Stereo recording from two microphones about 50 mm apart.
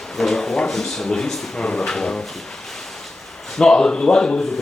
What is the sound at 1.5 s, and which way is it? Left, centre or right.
Speech, centre.